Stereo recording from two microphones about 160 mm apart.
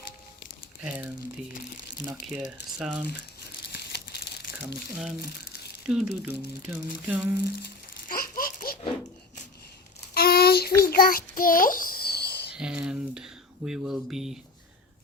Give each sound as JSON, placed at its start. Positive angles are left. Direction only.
{"t": 2.2, "sound": "speech", "side_deg": 0}
{"t": 3.8, "sound": "crumpling", "side_deg": 90}
{"t": 5.9, "sound": "speech", "side_deg": -5}
{"t": 8.0, "sound": "laughter", "side_deg": 65}
{"t": 10.2, "sound": "child singing", "side_deg": 75}
{"t": 12.5, "sound": "speech", "side_deg": -5}